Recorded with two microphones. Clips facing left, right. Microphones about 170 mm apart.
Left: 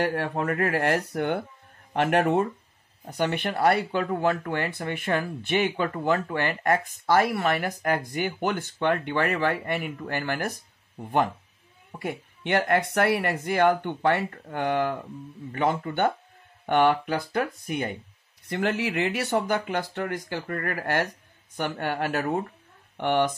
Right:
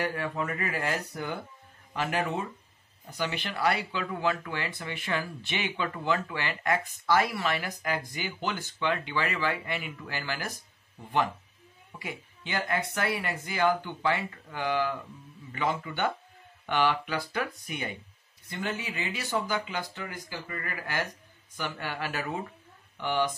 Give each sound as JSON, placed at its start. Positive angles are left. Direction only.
{"t": 0.0, "sound": "speech", "side_deg": 65}
{"t": 12.0, "sound": "speech", "side_deg": 60}
{"t": 18.5, "sound": "speech", "side_deg": 75}